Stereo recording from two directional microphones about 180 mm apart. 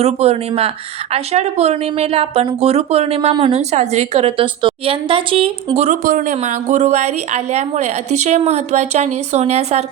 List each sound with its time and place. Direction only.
0.0 s speech: 35° right (ahead or behind)